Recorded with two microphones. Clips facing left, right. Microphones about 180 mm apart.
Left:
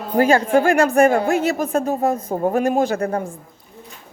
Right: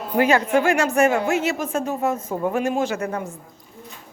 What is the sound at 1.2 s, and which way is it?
Speech, 35° left (ahead or behind).